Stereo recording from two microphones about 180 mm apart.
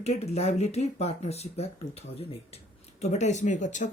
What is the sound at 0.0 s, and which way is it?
Speech, 35° left (ahead or behind).